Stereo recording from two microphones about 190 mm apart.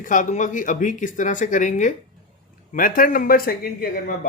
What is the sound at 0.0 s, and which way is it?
Speech, 40° left (ahead or behind).